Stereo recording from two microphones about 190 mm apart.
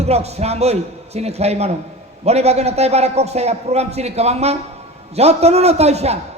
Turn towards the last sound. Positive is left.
turn(degrees=-35)  # may be behind; listen again after turning